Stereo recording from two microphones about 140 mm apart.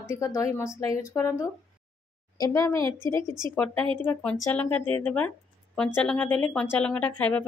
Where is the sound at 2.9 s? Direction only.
30° right (ahead or behind).